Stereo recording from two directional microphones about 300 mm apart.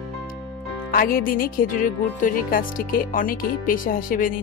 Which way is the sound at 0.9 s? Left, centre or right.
Left.